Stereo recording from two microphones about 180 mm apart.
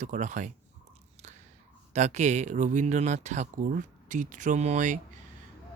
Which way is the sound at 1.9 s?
40° right (ahead or behind).